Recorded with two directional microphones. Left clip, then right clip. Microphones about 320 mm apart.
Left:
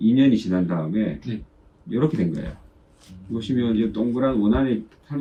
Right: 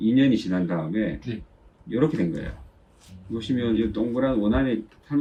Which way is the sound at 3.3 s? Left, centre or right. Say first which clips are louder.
Left 1 dB; centre.